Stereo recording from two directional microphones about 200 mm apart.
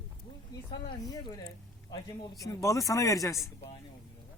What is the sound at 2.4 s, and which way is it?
Speech, 15° left (ahead or behind).